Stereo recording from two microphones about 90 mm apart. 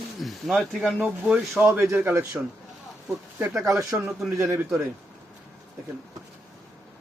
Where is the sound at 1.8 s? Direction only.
25° right (ahead or behind).